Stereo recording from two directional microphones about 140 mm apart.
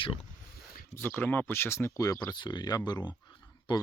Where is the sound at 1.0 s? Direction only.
15° left (ahead or behind).